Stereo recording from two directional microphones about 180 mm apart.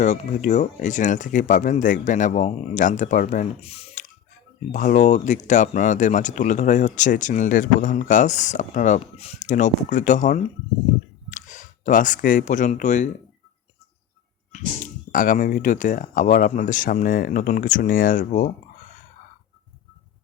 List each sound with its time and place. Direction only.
0.0 s speech: 45° left (ahead or behind)
3.6 s speech: 35° left (ahead or behind)
4.7 s speech: 45° left (ahead or behind)
15.1 s speech: 50° left (ahead or behind)